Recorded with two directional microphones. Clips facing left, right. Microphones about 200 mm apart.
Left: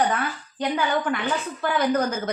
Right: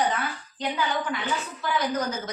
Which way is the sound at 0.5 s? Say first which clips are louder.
Left 4 dB; 55° left (ahead or behind).